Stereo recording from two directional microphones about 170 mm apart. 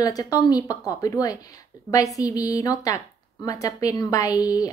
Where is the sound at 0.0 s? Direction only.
20° left (ahead or behind).